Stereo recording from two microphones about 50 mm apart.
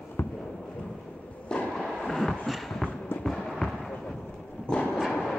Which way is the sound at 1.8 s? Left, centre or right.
Centre.